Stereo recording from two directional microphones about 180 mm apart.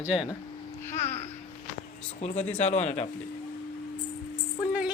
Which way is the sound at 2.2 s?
40° left (ahead or behind).